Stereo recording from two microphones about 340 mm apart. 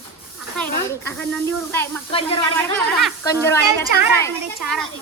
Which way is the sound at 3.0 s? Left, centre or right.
Centre.